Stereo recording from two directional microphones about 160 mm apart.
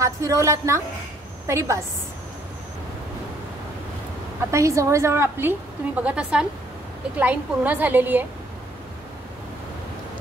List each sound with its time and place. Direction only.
0.0 s a woman's voice: 20° right (ahead or behind)
4.4 s a woman's voice: 20° right (ahead or behind)